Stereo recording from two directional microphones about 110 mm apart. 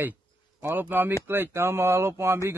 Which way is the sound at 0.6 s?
15° right (ahead or behind).